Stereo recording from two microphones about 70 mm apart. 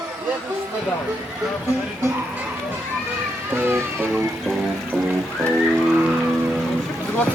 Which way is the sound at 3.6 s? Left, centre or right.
Right.